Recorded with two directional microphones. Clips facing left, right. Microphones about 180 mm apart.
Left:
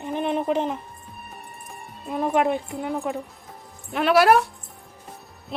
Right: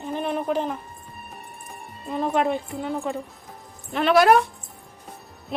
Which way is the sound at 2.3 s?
15° left (ahead or behind).